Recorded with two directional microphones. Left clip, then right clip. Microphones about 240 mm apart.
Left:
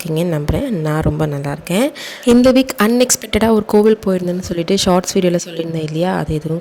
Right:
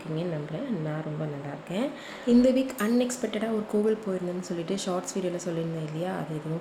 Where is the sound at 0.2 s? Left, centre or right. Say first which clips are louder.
Left 15 dB; left.